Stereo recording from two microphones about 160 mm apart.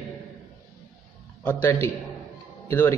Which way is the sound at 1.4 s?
15° left (ahead or behind).